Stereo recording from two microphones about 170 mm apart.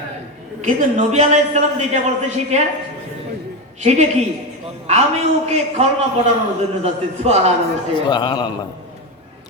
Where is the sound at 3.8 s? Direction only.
40° right (ahead or behind).